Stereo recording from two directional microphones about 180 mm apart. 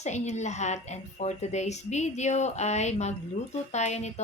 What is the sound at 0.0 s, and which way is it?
A woman's voice, 40° left (ahead or behind).